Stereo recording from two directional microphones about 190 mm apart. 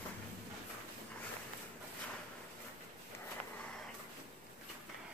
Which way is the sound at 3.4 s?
30° right (ahead or behind).